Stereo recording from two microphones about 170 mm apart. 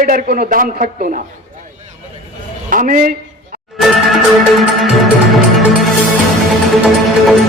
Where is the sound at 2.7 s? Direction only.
55° right (ahead or behind).